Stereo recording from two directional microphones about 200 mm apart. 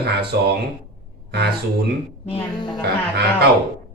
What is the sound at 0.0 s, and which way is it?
Speech, 55° right (ahead or behind).